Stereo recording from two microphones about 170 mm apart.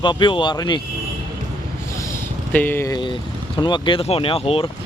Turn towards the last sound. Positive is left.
turn(degrees=35)  # may be behind; listen again after turning